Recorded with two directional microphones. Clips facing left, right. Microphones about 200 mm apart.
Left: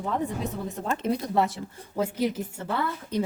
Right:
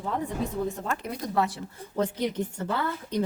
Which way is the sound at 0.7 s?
20° left (ahead or behind).